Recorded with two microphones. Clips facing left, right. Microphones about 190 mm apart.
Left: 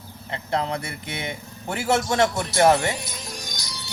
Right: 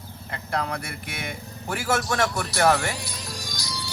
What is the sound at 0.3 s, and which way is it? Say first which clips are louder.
A man's voice: left 3 dB; 25° left (ahead or behind).